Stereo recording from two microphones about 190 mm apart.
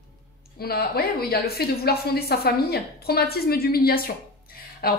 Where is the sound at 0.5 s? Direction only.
55° left (ahead or behind).